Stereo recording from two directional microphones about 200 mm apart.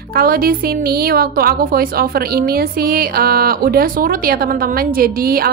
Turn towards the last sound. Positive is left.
turn(degrees=-50)  # may be behind; listen again after turning